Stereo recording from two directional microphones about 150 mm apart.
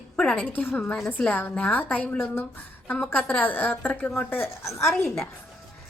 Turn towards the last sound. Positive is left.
turn(degrees=0)  # may be behind; listen again after turning